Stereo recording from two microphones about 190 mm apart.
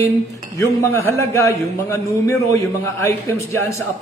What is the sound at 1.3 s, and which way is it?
A man's voice, 15° left (ahead or behind).